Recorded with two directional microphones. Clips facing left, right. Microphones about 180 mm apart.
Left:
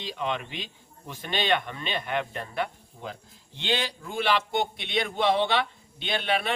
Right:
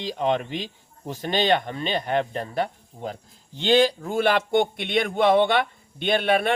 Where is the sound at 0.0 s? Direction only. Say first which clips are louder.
Right 7 dB; 40° right (ahead or behind).